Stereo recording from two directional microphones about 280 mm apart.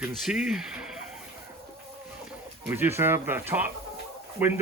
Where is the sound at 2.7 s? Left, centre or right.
Centre.